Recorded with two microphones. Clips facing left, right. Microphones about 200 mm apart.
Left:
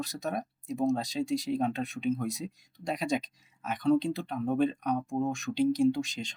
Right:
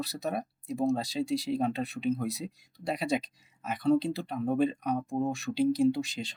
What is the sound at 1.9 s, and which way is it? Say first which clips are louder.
Speech: even; 35° right (ahead or behind).